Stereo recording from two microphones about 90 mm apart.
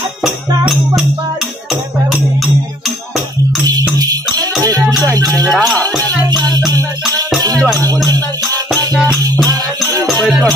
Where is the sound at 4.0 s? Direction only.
45° right (ahead or behind).